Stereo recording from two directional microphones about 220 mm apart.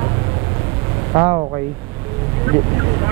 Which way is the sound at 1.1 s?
20° right (ahead or behind).